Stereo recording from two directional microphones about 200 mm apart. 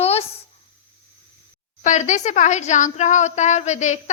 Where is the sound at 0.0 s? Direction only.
30° left (ahead or behind).